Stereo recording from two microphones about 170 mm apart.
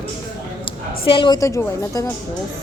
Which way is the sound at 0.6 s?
30° left (ahead or behind).